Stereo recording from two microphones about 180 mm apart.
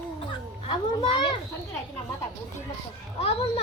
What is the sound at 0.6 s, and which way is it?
Speech, 25° left (ahead or behind).